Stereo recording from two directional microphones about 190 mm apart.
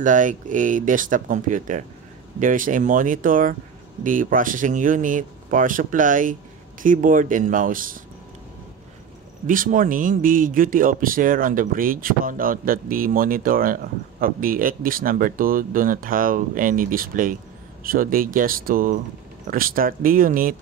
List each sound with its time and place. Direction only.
0.0 s speech: 45° right (ahead or behind)
9.5 s speech: 45° right (ahead or behind)